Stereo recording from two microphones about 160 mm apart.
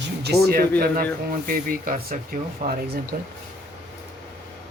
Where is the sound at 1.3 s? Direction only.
60° right (ahead or behind).